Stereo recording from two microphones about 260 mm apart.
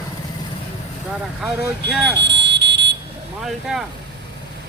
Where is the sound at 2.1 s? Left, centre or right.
Right.